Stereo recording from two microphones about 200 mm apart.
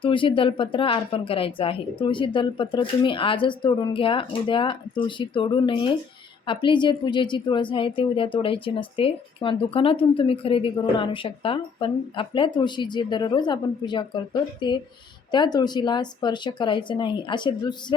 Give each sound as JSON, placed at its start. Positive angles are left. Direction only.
{"t": 0.0, "sound": "a woman's voice", "side_deg": 25}